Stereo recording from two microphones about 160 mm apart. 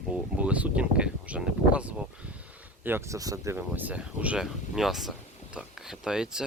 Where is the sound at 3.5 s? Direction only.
10° right (ahead or behind).